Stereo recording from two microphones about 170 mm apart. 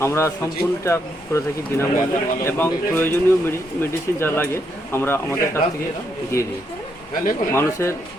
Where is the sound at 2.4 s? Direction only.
15° left (ahead or behind).